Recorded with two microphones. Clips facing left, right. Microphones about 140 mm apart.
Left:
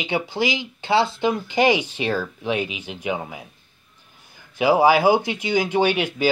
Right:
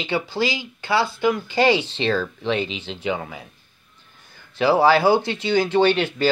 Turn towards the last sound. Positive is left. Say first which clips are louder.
# right 2 dB
turn(degrees=10)  # may be behind; listen again after turning